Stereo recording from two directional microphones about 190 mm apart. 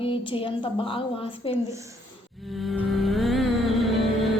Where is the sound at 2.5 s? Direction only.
Centre (ahead or behind).